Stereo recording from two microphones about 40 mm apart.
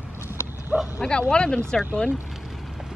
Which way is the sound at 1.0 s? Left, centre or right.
Left.